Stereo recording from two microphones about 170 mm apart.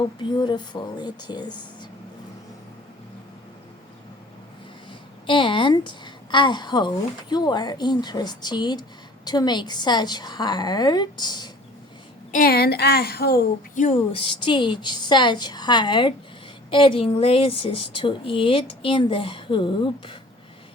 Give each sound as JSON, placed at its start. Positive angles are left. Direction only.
{"t": 0.2, "sound": "a woman's voice", "side_deg": 25}
{"t": 5.2, "sound": "a woman's voice", "side_deg": 30}
{"t": 12.3, "sound": "a woman's voice", "side_deg": 60}
{"t": 14.2, "sound": "a woman's voice", "side_deg": 30}